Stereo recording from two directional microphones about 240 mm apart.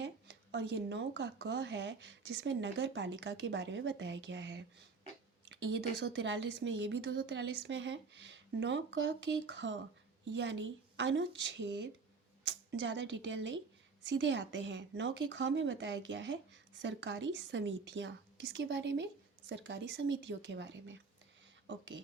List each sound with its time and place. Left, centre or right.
0.5 s speech: right